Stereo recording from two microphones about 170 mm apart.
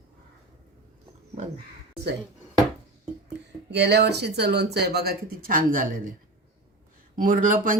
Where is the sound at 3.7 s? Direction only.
75° right (ahead or behind); by 5.8 s 55° right (ahead or behind).